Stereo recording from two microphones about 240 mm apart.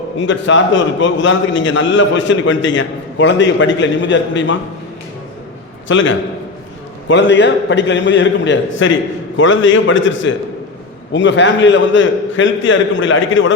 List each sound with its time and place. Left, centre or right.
0.2 s a man's voice: left
5.9 s a man's voice: left